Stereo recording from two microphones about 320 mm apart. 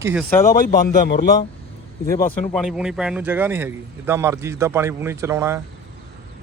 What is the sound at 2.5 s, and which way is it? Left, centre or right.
Speech, centre.